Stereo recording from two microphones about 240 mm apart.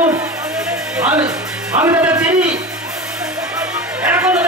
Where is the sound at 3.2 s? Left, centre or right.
Centre.